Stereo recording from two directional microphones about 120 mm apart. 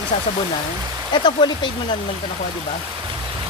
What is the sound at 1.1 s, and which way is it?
Speech, 40° left (ahead or behind).